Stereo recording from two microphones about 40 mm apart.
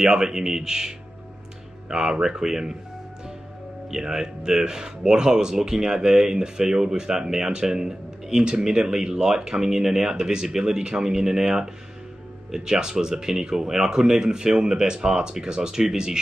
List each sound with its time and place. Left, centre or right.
0.0 s speech: centre
3.9 s speech: centre